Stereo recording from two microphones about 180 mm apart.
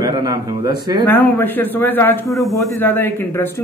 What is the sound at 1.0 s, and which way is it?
A man's voice, 10° left (ahead or behind).